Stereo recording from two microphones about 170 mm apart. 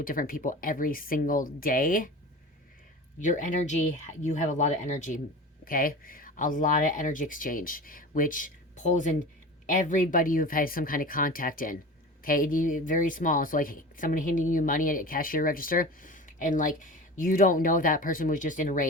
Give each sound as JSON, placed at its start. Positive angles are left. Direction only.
{"t": 0.0, "sound": "a woman's voice", "side_deg": 55}
{"t": 3.2, "sound": "a woman's voice", "side_deg": 50}